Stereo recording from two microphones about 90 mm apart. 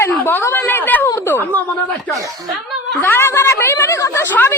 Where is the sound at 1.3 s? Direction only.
20° left (ahead or behind).